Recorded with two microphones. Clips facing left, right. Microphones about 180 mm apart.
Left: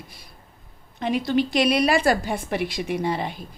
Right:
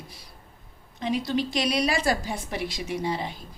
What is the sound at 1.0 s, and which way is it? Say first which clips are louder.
A woman's voice: left 4 dB; 60° left (ahead or behind).